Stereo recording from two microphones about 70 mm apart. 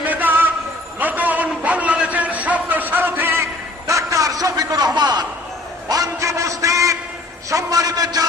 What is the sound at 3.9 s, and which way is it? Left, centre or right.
A man's voice, right.